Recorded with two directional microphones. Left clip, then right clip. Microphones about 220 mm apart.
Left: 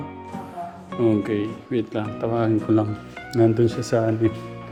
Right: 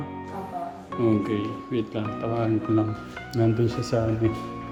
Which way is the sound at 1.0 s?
15° left (ahead or behind).